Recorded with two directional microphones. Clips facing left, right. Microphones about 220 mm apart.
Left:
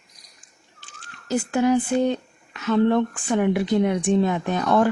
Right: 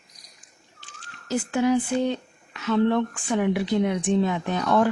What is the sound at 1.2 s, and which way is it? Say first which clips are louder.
A woman's voice: left 2 dB; 50° left (ahead or behind).